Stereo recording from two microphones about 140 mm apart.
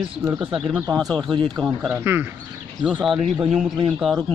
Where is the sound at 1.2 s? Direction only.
35° right (ahead or behind).